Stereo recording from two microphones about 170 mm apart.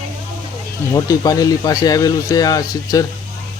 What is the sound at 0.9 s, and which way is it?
Speech, 20° left (ahead or behind).